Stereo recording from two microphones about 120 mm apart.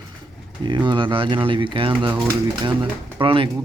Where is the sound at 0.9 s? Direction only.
45° right (ahead or behind).